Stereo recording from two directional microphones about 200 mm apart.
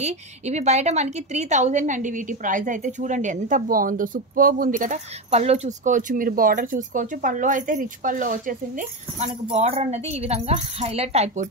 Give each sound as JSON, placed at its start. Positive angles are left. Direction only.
{"t": 0.0, "sound": "a woman's voice", "side_deg": -35}
{"t": 9.5, "sound": "a woman's voice", "side_deg": -30}